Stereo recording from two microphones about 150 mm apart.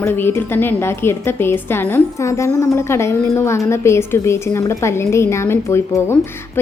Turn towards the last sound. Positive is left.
turn(degrees=15)  # may be behind; listen again after turning